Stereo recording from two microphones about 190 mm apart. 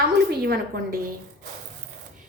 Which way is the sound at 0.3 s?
55° right (ahead or behind).